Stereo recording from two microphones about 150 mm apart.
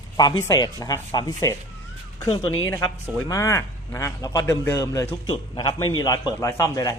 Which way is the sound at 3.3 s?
20° left (ahead or behind).